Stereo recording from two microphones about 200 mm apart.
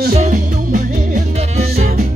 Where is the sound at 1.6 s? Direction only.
45° right (ahead or behind).